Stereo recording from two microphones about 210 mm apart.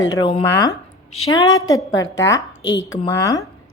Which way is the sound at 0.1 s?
25° left (ahead or behind).